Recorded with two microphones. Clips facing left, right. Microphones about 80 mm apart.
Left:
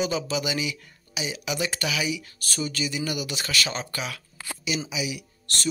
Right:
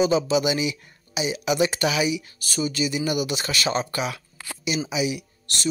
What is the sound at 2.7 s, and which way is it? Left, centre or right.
Speech, centre.